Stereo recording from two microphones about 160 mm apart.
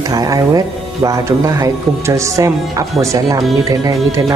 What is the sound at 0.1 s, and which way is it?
Speech, 20° right (ahead or behind).